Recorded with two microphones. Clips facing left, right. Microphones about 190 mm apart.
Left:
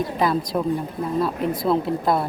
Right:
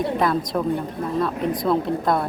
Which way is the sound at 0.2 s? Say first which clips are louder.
Even; centre (ahead or behind).